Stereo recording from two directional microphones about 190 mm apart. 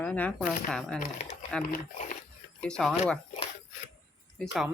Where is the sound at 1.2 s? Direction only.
35° left (ahead or behind).